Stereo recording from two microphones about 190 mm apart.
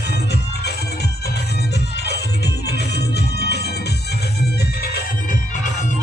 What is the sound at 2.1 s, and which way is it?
Music, 60° left (ahead or behind).